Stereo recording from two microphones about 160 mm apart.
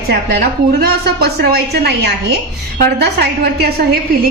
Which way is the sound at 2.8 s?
80° right.